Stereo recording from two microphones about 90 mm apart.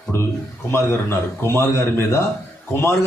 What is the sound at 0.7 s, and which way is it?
A man's voice, 30° left (ahead or behind).